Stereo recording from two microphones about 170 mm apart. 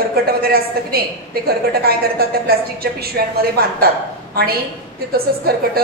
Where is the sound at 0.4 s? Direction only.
65° right (ahead or behind).